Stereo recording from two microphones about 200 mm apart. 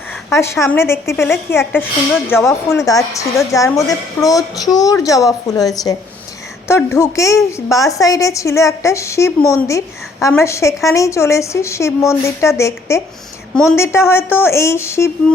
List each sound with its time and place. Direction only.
0.3 s a woman's voice: 15° left (ahead or behind)